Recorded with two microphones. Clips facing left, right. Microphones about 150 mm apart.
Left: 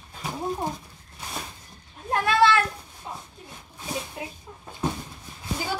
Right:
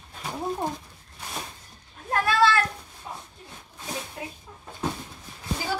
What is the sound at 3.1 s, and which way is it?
Shuffle, 25° left (ahead or behind).